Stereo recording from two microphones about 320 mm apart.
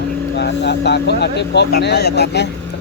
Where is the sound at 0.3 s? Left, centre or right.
Left.